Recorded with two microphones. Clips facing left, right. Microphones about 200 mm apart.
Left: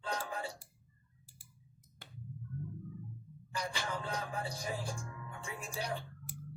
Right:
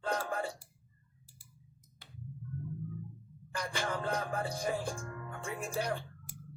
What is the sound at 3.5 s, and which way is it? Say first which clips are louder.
Music: right 3 dB; 55° right (ahead or behind).